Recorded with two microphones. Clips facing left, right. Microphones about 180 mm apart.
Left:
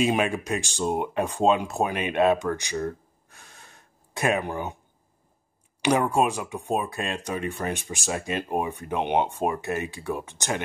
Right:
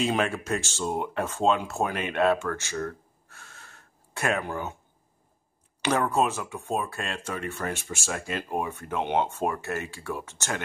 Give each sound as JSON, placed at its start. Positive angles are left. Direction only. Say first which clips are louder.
{"t": 0.0, "sound": "speech", "louder": "left 3 dB", "side_deg": 15}
{"t": 5.8, "sound": "speech", "louder": "left 3 dB", "side_deg": 15}